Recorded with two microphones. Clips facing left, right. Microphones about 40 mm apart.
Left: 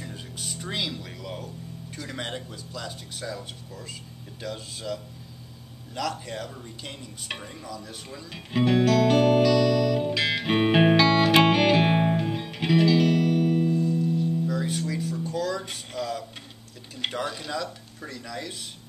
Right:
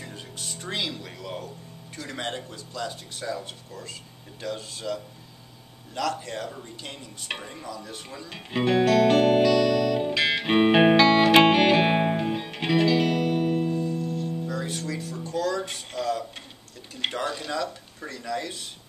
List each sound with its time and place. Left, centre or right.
0.0 s music: centre
2.0 s speech: centre
5.9 s a sound: centre
14.0 s music: centre
16.9 s speech: centre